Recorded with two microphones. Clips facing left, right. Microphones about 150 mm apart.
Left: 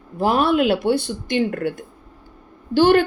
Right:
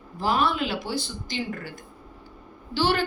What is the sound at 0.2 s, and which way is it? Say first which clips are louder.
A woman's voice: left 7 dB; 60° left (ahead or behind).